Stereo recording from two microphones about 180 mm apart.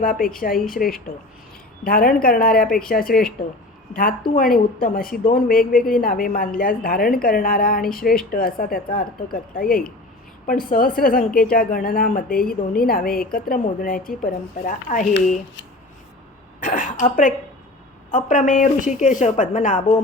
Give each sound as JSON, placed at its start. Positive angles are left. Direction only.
{"t": 0.0, "sound": "a woman's voice", "side_deg": 50}
{"t": 4.5, "sound": "a woman's voice", "side_deg": 55}
{"t": 16.6, "sound": "throat clearing", "side_deg": 45}
{"t": 18.1, "sound": "a woman's voice", "side_deg": 45}